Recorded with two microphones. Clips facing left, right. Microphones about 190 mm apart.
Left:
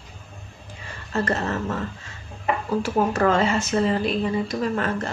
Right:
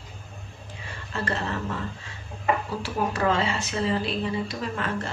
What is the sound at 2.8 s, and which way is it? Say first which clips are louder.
Speech: left 5 dB; 45° left (ahead or behind).